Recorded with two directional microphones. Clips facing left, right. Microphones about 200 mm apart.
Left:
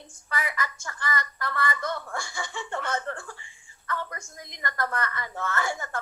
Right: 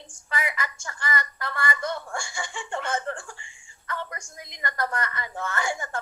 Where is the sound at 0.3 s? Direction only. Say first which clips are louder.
Right 1 dB; 20° right (ahead or behind).